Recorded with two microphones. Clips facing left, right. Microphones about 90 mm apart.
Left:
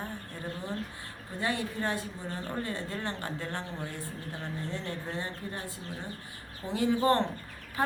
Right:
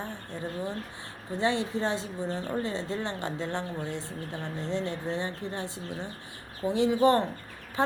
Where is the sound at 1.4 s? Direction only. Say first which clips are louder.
Right 4 dB; 25° right (ahead or behind).